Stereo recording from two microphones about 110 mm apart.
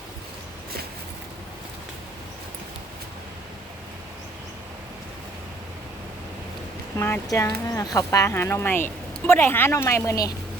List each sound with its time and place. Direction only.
7.3 s speech: 30° left (ahead or behind)